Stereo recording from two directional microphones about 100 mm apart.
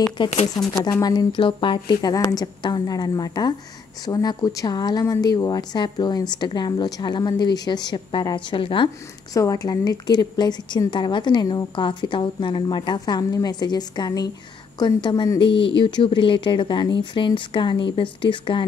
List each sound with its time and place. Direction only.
0.2 s speech: 55° left (ahead or behind)
0.7 s a woman's voice: 35° left (ahead or behind)
1.3 s speech: 55° left (ahead or behind); by 8.4 s 40° left (ahead or behind)
8.5 s speech: 55° left (ahead or behind)
9.3 s a woman's voice: 35° left (ahead or behind)
15.3 s speech: 60° left (ahead or behind)